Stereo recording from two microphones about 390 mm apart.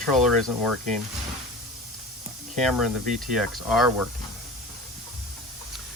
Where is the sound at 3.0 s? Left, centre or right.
Centre.